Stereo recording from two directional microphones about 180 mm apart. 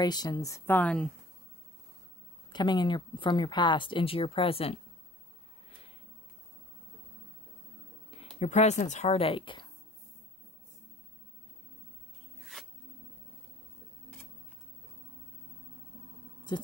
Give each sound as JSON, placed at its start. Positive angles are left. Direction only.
{"t": 0.0, "sound": "speech", "side_deg": 20}
{"t": 2.5, "sound": "speech", "side_deg": 25}
{"t": 8.1, "sound": "speech", "side_deg": 35}
{"t": 16.5, "sound": "a sound", "side_deg": 25}